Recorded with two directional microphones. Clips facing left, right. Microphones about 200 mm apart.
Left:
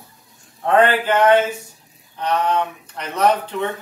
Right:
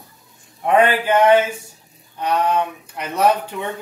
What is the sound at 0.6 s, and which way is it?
Speech, 15° right (ahead or behind).